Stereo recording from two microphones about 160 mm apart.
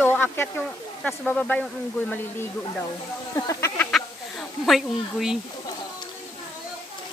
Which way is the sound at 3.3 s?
20° left (ahead or behind).